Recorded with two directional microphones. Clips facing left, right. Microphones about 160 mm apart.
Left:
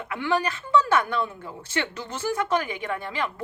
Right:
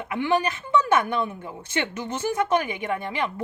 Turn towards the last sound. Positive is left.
turn(degrees=-20)  # may be behind; listen again after turning